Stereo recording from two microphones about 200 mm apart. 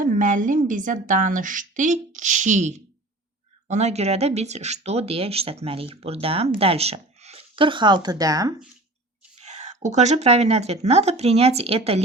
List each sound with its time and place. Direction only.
0.0 s a woman's voice: 40° right (ahead or behind); by 8.5 s 20° right (ahead or behind)
9.4 s a woman's voice: 35° right (ahead or behind)